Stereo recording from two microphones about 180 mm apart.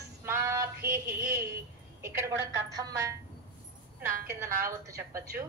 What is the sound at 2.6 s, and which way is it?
Speech, 20° right (ahead or behind).